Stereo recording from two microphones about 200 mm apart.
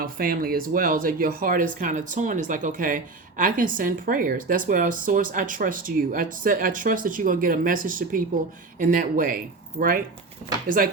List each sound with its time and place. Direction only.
0.0 s speech: 45° right (ahead or behind)